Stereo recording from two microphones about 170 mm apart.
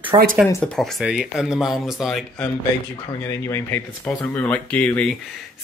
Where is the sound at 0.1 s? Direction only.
25° right (ahead or behind).